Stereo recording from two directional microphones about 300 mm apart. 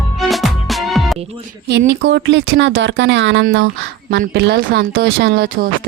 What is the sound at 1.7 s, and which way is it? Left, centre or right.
Speech, right.